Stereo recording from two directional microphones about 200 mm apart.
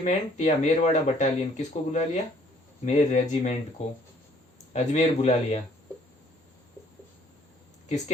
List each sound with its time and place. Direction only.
0.0 s speech: 35° left (ahead or behind)
4.7 s speech: 35° left (ahead or behind)
7.9 s speech: 35° left (ahead or behind)